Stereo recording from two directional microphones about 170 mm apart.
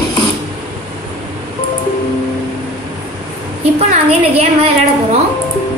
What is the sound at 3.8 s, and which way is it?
Speech, 40° right (ahead or behind).